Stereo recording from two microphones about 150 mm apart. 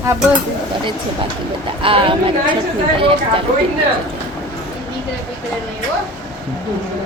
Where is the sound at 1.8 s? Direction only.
35° right (ahead or behind).